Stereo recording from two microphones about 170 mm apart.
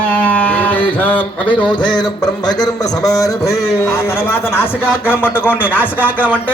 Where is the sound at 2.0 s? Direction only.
25° left (ahead or behind).